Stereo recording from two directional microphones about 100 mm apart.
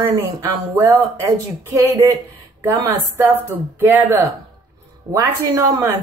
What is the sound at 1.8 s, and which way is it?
A woman's voice, 30° right (ahead or behind).